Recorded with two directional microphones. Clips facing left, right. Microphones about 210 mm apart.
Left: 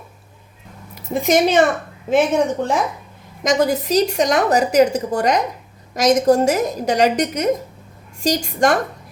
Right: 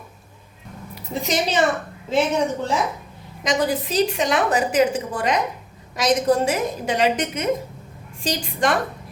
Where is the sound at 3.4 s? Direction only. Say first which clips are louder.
Left 4 dB; 45° left (ahead or behind).